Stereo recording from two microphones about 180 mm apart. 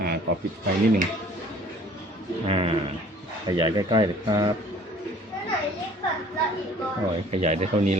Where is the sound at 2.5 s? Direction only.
30° right (ahead or behind).